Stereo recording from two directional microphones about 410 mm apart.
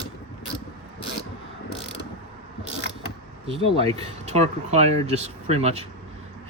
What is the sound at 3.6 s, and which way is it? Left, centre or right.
Speech, centre.